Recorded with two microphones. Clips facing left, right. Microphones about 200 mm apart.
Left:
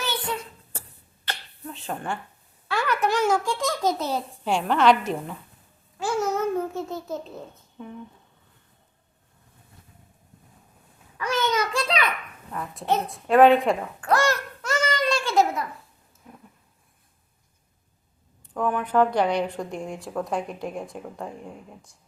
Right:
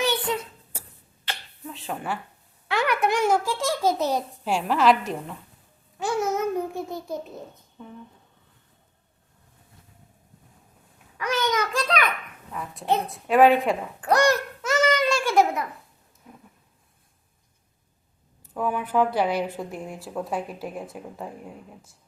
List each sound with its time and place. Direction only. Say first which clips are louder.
0.0 s a sound: right 5 dB; 20° right (ahead or behind)
1.3 s finger snapping: left 1 dB; centre (ahead or behind)
2.6 s a child's voice: right 1 dB; 15° right (ahead or behind); by 5.4 s centre (ahead or behind)
6.0 s babbling: even; 15° right (ahead or behind)
7.8 s speech: left 4 dB; centre (ahead or behind)
11.2 s babbling: even; 10° right (ahead or behind)
12.5 s a woman's voice: even; centre (ahead or behind)
14.0 s a child's voice: right 3 dB; 20° right (ahead or behind)
14.6 s babbling: right 3 dB; 5° right (ahead or behind)
18.4 s a woman's voice: left 1 dB; 5° right (ahead or behind)